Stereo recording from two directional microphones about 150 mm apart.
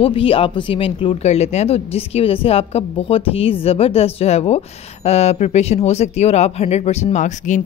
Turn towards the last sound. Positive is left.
turn(degrees=55)  # may be behind; listen again after turning